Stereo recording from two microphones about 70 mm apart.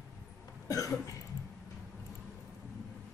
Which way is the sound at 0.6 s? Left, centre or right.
Left.